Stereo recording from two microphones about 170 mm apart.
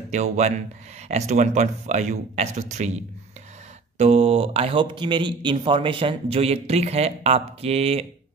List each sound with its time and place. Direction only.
0.1 s speech: 40° right (ahead or behind)
4.0 s speech: 35° right (ahead or behind)